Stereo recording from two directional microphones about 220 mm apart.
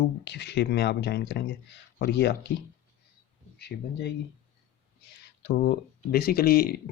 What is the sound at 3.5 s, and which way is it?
Speech, 50° left (ahead or behind).